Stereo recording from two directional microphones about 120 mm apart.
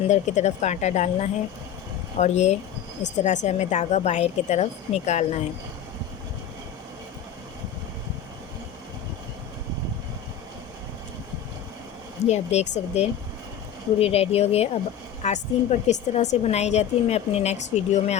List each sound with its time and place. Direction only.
0.1 s a woman's voice: 75° left (ahead or behind)
3.2 s a woman's voice: 85° left; by 5.4 s 70° left (ahead or behind)
12.3 s a woman's voice: 65° left (ahead or behind)
15.2 s a woman's voice: 70° left (ahead or behind)